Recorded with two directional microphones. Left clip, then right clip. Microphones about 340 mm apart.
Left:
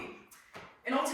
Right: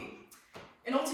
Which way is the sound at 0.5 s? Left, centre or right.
Centre.